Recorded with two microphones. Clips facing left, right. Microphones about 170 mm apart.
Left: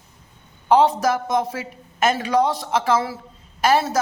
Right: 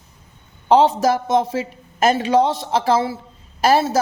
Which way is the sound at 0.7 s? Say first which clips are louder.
Right 2 dB; 25° right (ahead or behind).